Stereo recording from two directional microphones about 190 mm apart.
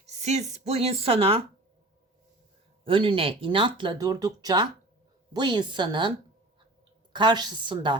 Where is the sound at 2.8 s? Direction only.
25° right (ahead or behind).